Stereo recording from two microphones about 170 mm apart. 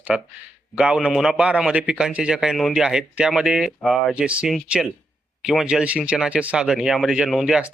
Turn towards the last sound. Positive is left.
turn(degrees=0)  # may be behind; listen again after turning